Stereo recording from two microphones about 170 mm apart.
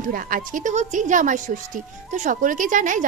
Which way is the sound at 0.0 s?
55° right (ahead or behind).